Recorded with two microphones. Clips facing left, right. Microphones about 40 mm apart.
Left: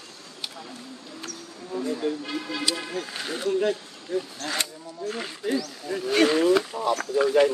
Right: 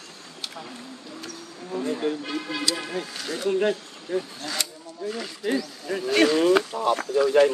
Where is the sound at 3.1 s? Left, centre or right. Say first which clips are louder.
Even; left.